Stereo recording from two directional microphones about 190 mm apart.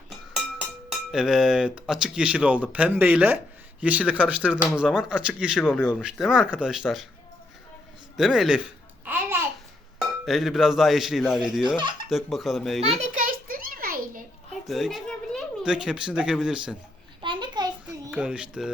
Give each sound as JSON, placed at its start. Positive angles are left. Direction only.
{"t": 0.3, "sound": "speech", "side_deg": -5}
{"t": 5.6, "sound": "speech", "side_deg": 10}
{"t": 5.9, "sound": "speech", "side_deg": -5}
{"t": 8.1, "sound": "speech", "side_deg": 0}
{"t": 9.0, "sound": "babbling", "side_deg": -10}
{"t": 10.0, "sound": "cowbell", "side_deg": 0}
{"t": 12.0, "sound": "speech", "side_deg": 0}
{"t": 13.2, "sound": "a sound", "side_deg": -50}
{"t": 14.7, "sound": "a child's voice", "side_deg": 0}
{"t": 17.2, "sound": "a sound", "side_deg": -25}
{"t": 18.1, "sound": "speech", "side_deg": -5}